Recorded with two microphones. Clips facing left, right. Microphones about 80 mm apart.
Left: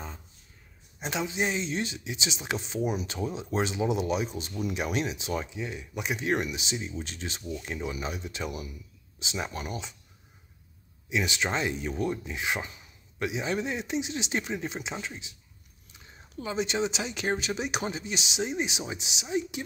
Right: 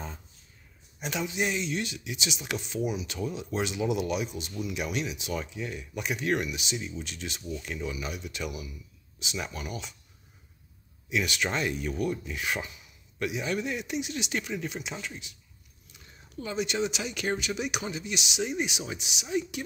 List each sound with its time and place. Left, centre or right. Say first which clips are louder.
0.9 s speech: left 1 dB; left
11.1 s speech: even; left